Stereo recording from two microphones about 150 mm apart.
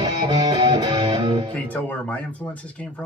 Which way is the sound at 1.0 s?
40° right (ahead or behind).